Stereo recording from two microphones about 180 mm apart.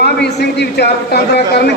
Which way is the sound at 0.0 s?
70° left (ahead or behind).